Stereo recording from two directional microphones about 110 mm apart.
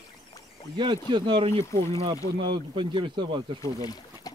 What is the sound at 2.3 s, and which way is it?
Speech, 50° right (ahead or behind).